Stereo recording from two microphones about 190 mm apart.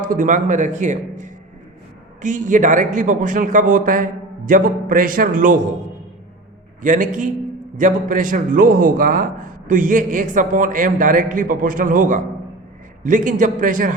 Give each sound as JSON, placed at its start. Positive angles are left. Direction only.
{"t": 0.0, "sound": "a man's voice", "side_deg": -45}
{"t": 6.8, "sound": "a man's voice", "side_deg": -40}